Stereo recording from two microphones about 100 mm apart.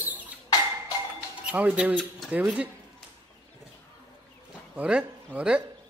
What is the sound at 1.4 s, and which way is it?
Speech, 15° right (ahead or behind).